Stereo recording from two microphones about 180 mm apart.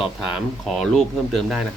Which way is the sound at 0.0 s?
Centre (ahead or behind).